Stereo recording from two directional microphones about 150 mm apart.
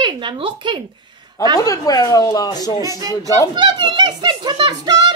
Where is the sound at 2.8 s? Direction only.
20° right (ahead or behind).